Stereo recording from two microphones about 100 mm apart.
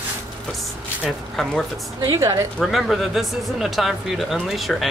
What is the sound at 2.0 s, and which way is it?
Speech, 30° right (ahead or behind).